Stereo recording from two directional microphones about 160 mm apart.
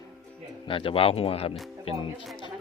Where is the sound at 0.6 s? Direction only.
35° left (ahead or behind).